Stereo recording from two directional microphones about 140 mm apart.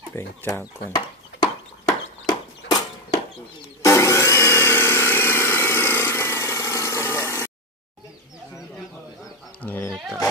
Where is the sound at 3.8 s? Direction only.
20° left (ahead or behind).